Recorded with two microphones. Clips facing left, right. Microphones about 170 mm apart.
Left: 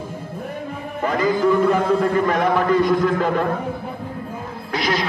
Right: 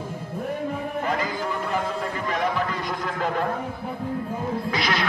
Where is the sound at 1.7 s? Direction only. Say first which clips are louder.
Left 10 dB; 60° left (ahead or behind).